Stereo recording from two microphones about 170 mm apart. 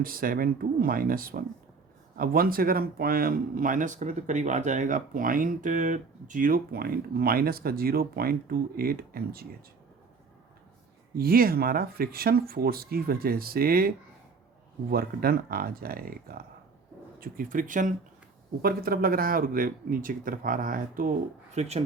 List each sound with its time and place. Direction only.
0.0 s speech: 55° right (ahead or behind)
11.1 s speech: 60° right (ahead or behind)
18.6 s speech: 60° right (ahead or behind)
21.5 s speech: 40° right (ahead or behind)